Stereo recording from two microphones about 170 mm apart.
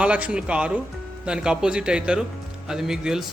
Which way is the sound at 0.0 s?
5° right (ahead or behind).